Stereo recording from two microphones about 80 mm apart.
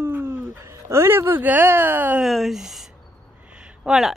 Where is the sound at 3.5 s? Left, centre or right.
Centre.